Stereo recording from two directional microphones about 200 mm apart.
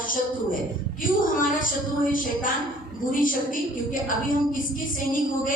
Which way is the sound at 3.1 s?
45° left (ahead or behind).